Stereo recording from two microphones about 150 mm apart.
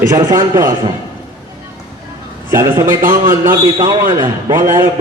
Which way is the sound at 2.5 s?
20° right (ahead or behind).